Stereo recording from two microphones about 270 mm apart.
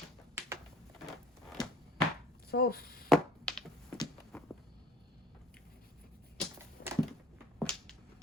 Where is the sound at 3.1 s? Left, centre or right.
Centre.